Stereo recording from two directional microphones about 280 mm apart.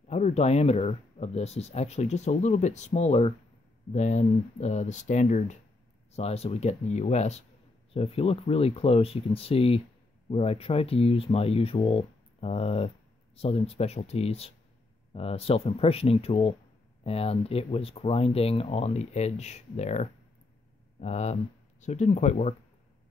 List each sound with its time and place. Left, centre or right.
0.1 s speech: left